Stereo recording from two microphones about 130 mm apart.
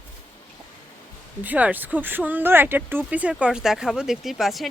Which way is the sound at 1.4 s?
10° right (ahead or behind).